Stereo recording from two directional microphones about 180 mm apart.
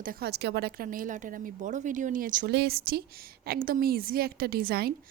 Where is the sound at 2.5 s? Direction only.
60° right (ahead or behind).